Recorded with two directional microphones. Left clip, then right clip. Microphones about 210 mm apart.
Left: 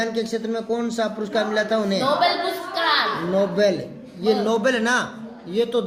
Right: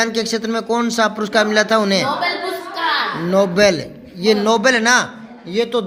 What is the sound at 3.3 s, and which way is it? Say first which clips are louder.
A man's voice: right 8 dB; 50° right (ahead or behind).